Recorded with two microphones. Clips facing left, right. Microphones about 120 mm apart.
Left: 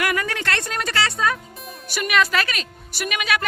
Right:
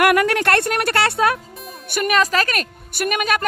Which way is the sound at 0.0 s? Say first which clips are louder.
Right 8 dB; 65° right (ahead or behind).